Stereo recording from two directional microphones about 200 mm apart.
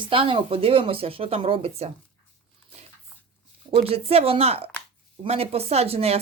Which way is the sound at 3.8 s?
30° right (ahead or behind).